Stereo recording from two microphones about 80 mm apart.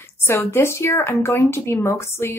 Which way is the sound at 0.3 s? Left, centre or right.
Left.